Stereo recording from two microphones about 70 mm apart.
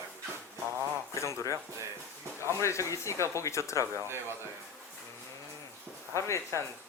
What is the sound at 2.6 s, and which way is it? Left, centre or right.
Speech, left.